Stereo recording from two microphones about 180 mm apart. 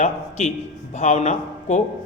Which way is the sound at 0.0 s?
40° left (ahead or behind).